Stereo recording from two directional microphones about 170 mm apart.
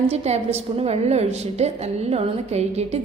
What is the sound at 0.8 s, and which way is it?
A woman's voice, 40° right (ahead or behind).